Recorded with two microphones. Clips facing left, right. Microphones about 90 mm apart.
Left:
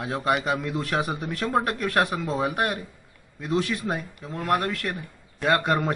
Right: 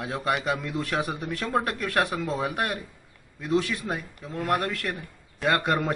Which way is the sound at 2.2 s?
15° left (ahead or behind).